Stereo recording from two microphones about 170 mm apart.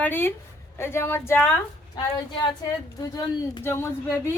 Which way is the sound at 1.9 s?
25° left (ahead or behind).